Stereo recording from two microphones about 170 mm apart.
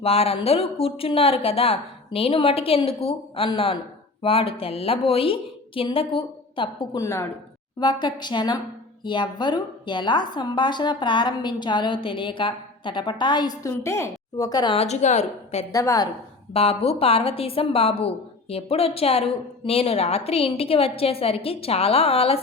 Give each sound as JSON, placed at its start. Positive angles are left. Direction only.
{"t": 0.0, "sound": "a woman's voice", "side_deg": 35}
{"t": 7.0, "sound": "a woman's voice", "side_deg": 20}
{"t": 15.7, "sound": "a woman's voice", "side_deg": 20}
{"t": 16.5, "sound": "a woman's voice", "side_deg": 35}